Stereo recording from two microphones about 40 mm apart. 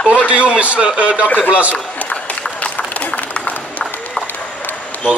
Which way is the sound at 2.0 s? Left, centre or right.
Left.